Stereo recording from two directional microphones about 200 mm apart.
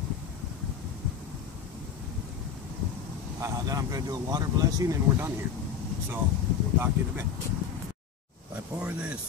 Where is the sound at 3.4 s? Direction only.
15° right (ahead or behind).